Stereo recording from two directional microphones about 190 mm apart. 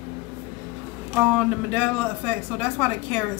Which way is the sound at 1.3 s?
5° right (ahead or behind).